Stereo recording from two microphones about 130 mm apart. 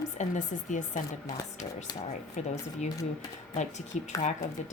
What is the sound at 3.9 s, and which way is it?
Speech, 65° left (ahead or behind).